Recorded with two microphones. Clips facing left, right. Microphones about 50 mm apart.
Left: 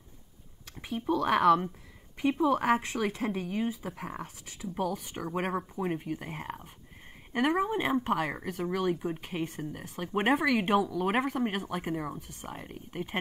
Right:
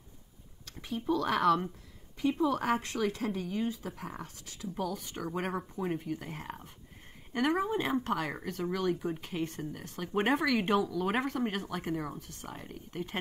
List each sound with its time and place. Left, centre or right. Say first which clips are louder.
0.8 s speech: left 2 dB; centre
2.6 s speech: left 4 dB; left
2.9 s speech: left 1 dB; centre